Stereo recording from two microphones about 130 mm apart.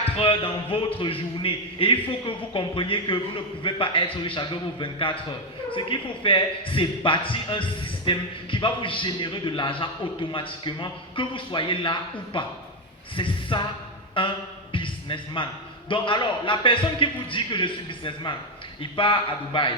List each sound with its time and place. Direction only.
0.0 s a man's voice: 45° left (ahead or behind)
14.2 s a sound: 40° left (ahead or behind)
15.9 s speech: 40° left (ahead or behind)